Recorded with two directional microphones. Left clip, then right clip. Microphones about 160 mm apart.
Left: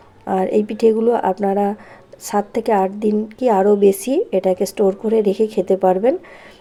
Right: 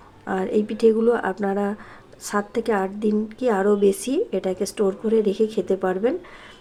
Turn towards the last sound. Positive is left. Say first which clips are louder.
# left 7 dB
turn(degrees=20)  # may be behind; listen again after turning